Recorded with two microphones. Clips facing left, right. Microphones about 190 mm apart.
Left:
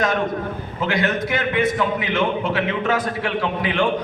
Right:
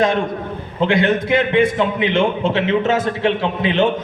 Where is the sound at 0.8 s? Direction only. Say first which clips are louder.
Right 6 dB; 30° right (ahead or behind).